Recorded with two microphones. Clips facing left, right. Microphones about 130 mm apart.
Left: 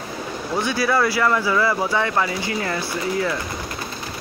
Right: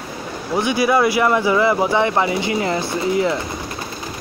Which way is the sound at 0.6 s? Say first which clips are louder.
Right 4 dB; 15° right (ahead or behind).